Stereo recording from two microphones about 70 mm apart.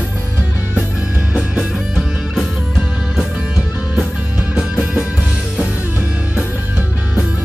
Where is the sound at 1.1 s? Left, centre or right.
Centre.